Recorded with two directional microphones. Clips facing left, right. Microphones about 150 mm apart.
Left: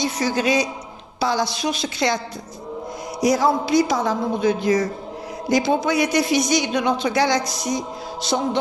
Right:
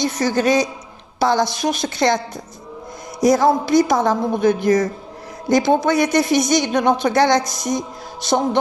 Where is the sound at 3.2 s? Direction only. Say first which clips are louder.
Right 4 dB; 50° right (ahead or behind).